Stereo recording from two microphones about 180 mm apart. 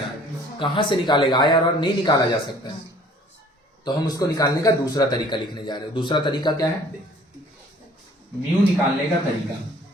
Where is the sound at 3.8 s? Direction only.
20° left (ahead or behind).